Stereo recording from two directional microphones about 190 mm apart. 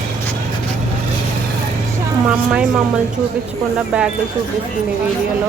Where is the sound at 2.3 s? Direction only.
5° right (ahead or behind).